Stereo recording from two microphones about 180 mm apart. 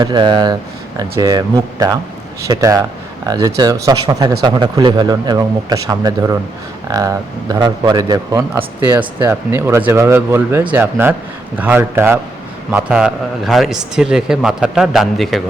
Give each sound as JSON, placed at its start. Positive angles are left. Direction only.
{"t": 0.0, "sound": "a man's voice", "side_deg": -25}